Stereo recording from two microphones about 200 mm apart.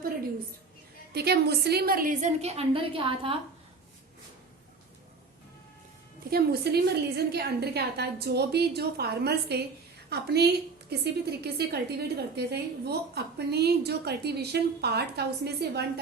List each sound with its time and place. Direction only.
1.1 s a woman's voice: 55° right (ahead or behind); by 3.3 s 25° right (ahead or behind)
6.3 s a woman's voice: 50° right (ahead or behind)